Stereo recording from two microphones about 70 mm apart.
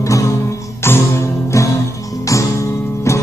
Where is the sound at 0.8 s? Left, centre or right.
Left.